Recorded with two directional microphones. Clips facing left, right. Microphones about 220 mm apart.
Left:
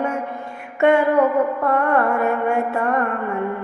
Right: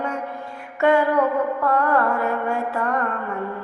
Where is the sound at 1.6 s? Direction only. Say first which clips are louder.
Left 2 dB; 25° left (ahead or behind).